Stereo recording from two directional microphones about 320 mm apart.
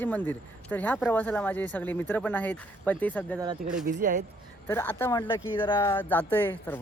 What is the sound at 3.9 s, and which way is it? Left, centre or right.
Speech, right.